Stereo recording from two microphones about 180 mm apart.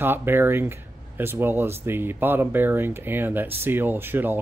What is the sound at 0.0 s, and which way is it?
Speech, 10° right (ahead or behind).